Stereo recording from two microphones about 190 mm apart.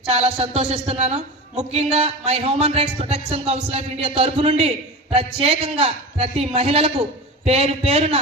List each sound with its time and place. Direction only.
0.1 s speech: 30° right (ahead or behind)